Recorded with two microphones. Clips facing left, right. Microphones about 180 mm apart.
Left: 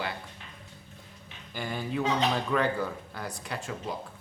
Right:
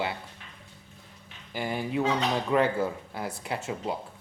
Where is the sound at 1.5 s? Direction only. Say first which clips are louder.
Right 3 dB; 20° right (ahead or behind).